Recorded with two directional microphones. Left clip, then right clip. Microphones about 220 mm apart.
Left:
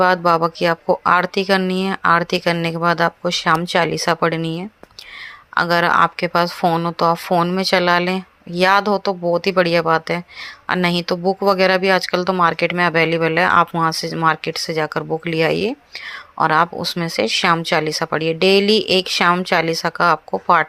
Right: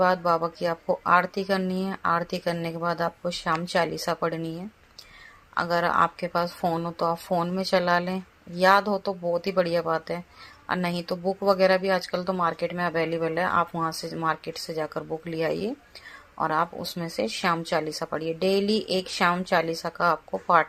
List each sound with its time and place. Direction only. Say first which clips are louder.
0.0 s speech: left 8 dB; 25° left (ahead or behind)